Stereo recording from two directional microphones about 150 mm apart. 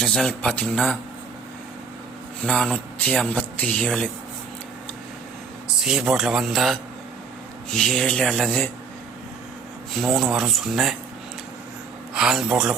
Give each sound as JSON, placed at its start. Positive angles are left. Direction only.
{"t": 0.0, "sound": "a man's voice", "side_deg": 5}
{"t": 2.4, "sound": "a man's voice", "side_deg": 5}
{"t": 5.6, "sound": "a man's voice", "side_deg": -5}
{"t": 9.9, "sound": "speech", "side_deg": 0}
{"t": 12.1, "sound": "speech", "side_deg": 0}